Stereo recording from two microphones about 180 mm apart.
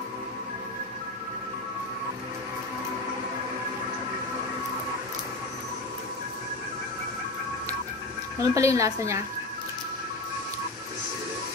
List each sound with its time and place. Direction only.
8.4 s a woman's voice: 15° right (ahead or behind)